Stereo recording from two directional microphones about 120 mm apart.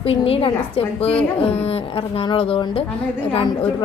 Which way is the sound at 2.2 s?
50° left (ahead or behind).